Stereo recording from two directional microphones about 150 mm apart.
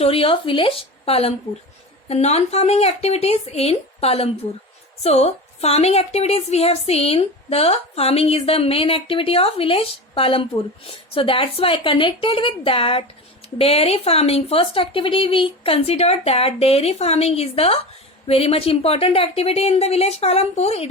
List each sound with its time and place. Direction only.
0.0 s a woman's voice: 40° left (ahead or behind)